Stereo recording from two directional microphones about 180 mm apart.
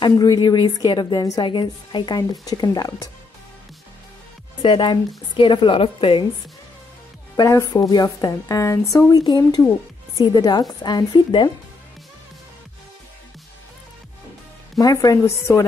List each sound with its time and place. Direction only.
0.0 s a woman's voice: 25° left (ahead or behind)
4.6 s a woman's voice: 25° left (ahead or behind)
7.3 s a woman's voice: 20° left (ahead or behind)
14.8 s a woman's voice: 20° left (ahead or behind)